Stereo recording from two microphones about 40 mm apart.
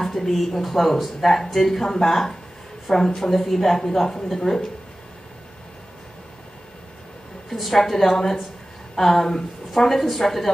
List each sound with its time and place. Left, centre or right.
0.0 s speech: centre
7.4 s a woman's voice: centre